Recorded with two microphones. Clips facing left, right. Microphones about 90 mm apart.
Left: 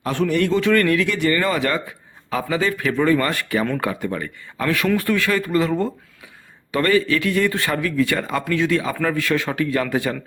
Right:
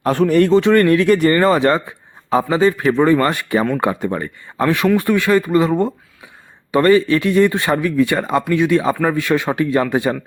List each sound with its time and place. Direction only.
0.0 s speech: 40° right (ahead or behind); by 10.2 s 25° right (ahead or behind)